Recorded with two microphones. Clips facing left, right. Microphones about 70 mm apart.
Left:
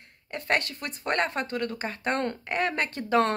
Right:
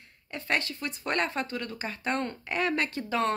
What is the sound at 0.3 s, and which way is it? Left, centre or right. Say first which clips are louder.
A woman's voice: left 3 dB; left.